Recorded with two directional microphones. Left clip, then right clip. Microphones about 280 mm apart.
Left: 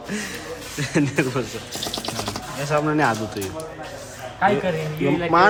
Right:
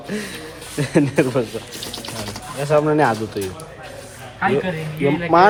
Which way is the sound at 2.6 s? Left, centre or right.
Centre.